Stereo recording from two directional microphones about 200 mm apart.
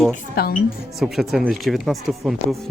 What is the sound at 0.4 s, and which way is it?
Speech, 50° left (ahead or behind).